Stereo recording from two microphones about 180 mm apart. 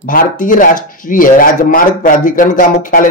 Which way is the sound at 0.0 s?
50° left (ahead or behind).